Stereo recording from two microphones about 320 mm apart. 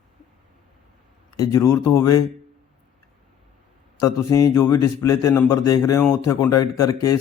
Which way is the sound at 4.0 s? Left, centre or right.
Centre.